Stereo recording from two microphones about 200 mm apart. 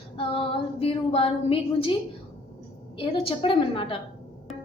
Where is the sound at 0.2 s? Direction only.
25° left (ahead or behind).